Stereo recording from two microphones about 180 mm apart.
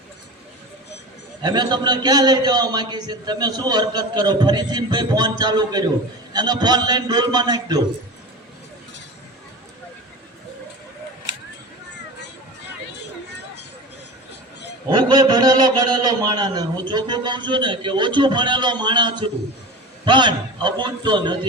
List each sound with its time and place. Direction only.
1.4 s a man's voice: 25° right (ahead or behind)
14.8 s a man's voice: 25° right (ahead or behind)